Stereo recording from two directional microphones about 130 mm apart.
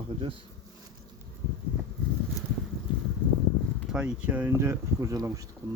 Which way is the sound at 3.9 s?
5° right (ahead or behind).